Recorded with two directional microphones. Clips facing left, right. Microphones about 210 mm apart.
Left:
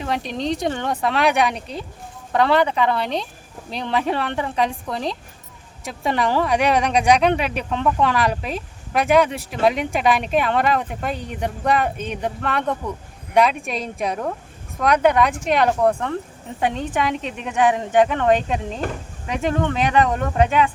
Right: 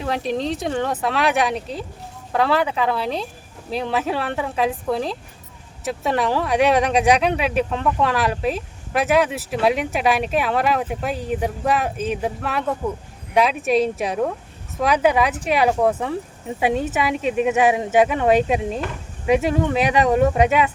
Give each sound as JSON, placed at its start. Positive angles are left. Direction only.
{"t": 0.0, "sound": "speech", "side_deg": 0}